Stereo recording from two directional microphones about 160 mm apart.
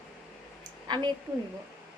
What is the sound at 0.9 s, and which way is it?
Speech, 25° right (ahead or behind).